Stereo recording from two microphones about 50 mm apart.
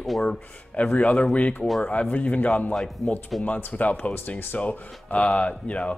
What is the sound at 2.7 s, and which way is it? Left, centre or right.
Speech, centre.